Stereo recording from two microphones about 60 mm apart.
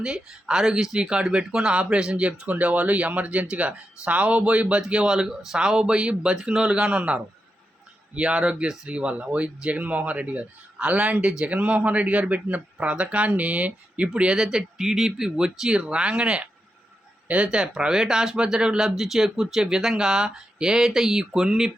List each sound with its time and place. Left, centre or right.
0.0 s speech: centre